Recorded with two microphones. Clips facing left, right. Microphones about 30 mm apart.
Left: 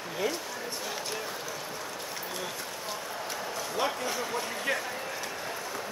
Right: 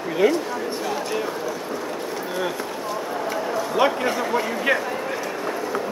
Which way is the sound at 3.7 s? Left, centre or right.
Right.